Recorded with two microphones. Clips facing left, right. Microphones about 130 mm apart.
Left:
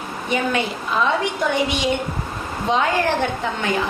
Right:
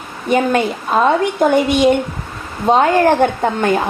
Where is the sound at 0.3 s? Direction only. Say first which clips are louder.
Right 7 dB; 50° right (ahead or behind).